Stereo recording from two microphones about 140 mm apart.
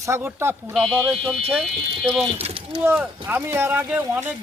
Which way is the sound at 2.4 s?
40° right (ahead or behind).